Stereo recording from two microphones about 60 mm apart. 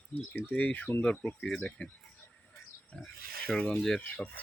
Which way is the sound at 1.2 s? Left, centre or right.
Centre.